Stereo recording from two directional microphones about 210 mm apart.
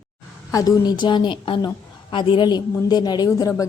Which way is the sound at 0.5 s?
15° left (ahead or behind).